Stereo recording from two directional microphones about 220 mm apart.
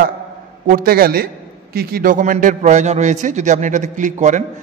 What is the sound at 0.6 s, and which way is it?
A man's voice, 40° right (ahead or behind).